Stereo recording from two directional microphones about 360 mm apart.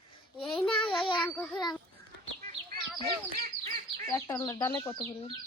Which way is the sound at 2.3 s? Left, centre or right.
Right.